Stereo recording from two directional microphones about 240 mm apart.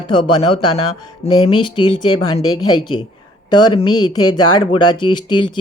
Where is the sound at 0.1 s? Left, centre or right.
Left.